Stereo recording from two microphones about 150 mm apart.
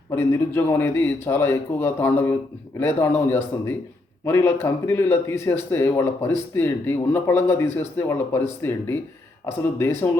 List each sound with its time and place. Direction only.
0.1 s speech: 15° left (ahead or behind)